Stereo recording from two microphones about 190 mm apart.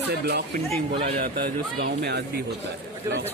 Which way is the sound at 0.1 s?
60° right (ahead or behind).